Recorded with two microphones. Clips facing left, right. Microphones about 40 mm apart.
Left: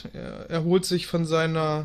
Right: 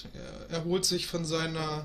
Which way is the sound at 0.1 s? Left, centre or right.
Centre.